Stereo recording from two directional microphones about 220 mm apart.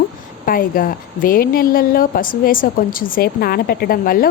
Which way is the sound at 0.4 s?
40° left (ahead or behind).